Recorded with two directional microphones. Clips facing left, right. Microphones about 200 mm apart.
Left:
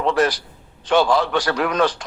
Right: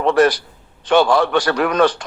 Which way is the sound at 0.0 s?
60° right (ahead or behind).